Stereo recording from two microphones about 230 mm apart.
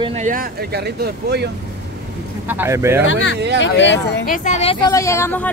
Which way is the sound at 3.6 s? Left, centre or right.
Left.